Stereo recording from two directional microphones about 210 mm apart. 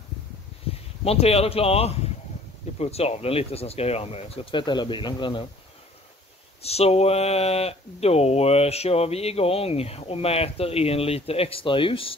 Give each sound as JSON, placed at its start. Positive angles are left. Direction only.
{"t": 1.0, "sound": "speech", "side_deg": 30}
{"t": 6.6, "sound": "speech", "side_deg": 30}